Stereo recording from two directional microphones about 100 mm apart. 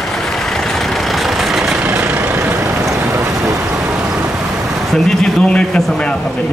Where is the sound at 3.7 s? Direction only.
15° right (ahead or behind).